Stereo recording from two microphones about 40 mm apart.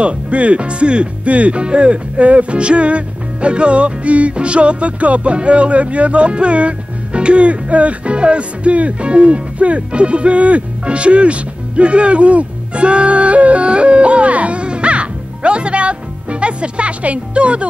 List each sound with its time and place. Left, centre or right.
0.0 s speech: right